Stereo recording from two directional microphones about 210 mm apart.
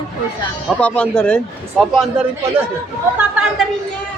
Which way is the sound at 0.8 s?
5° left (ahead or behind).